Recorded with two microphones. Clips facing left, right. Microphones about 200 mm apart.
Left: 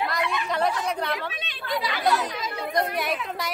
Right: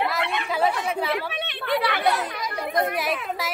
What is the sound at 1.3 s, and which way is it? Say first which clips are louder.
Chatter: right 5 dB; 65° right (ahead or behind).